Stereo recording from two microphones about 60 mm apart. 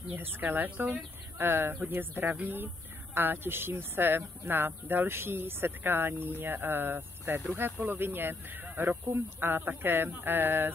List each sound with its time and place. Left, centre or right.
0.1 s speech: right
0.7 s speech: right
1.4 s speech: right